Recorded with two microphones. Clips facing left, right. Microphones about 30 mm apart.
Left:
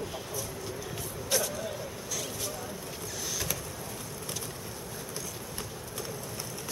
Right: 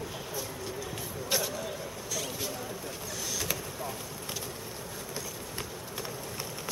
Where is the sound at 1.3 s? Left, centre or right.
Right.